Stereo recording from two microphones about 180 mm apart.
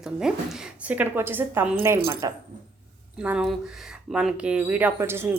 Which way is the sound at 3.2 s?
5° right (ahead or behind).